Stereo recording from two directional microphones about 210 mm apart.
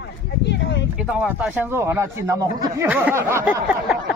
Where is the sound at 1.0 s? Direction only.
5° right (ahead or behind).